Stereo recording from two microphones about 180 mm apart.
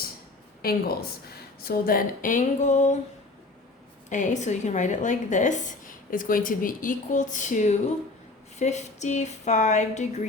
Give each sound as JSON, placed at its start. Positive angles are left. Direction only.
{"t": 0.6, "sound": "a woman's voice", "side_deg": 55}
{"t": 4.1, "sound": "a woman's voice", "side_deg": 40}